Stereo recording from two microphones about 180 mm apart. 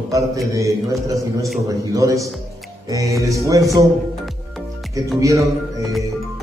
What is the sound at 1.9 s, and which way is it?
Mantra, 15° right (ahead or behind).